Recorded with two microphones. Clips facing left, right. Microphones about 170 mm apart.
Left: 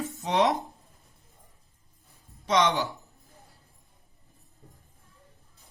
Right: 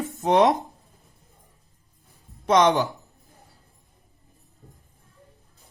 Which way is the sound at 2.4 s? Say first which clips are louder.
Right 6 dB; 45° right (ahead or behind).